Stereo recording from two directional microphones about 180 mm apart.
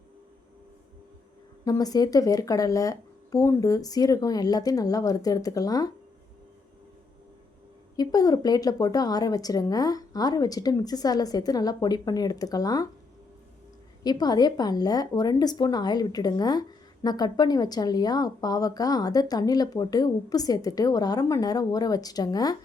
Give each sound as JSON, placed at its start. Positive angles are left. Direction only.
{"t": 1.6, "sound": "a woman's voice", "side_deg": 20}
{"t": 7.9, "sound": "a woman's voice", "side_deg": 20}
{"t": 14.0, "sound": "a woman's voice", "side_deg": 20}